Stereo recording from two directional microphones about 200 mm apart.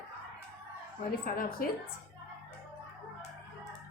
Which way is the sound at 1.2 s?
45° left (ahead or behind).